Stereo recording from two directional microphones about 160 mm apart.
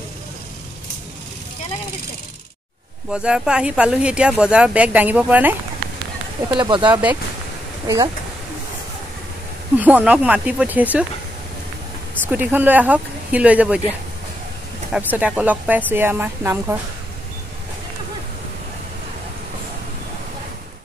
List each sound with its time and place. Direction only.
3.1 s speech: 5° right (ahead or behind)
6.5 s speech: 25° right (ahead or behind)
9.8 s speech: 10° right (ahead or behind)
12.3 s speech: 10° right (ahead or behind)
14.9 s speech: 10° right (ahead or behind)